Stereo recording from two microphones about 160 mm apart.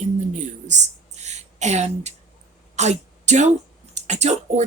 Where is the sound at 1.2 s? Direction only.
45° right (ahead or behind).